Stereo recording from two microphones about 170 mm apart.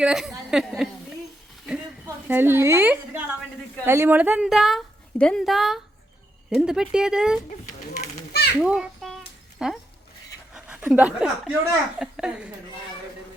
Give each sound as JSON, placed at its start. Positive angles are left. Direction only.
{"t": 0.0, "sound": "a woman's voice", "side_deg": -5}
{"t": 2.0, "sound": "a woman's voice", "side_deg": -10}
{"t": 7.9, "sound": "children playing", "side_deg": 70}
{"t": 8.6, "sound": "a sound", "side_deg": -5}
{"t": 10.5, "sound": "a woman's voice", "side_deg": -5}